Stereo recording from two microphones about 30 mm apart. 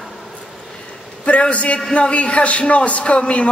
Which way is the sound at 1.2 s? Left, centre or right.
Left.